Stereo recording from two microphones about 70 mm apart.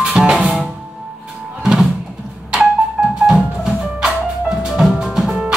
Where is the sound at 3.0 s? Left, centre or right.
Right.